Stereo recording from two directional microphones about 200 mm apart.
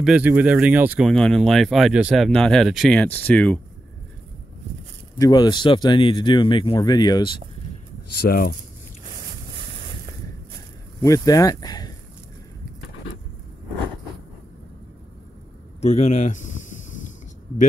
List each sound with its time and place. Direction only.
0.0 s speech: 5° right (ahead or behind)
5.2 s speech: 20° left (ahead or behind)
8.2 s speech: 50° left (ahead or behind)
11.0 s speech: 15° left (ahead or behind)
15.8 s speech: 35° left (ahead or behind)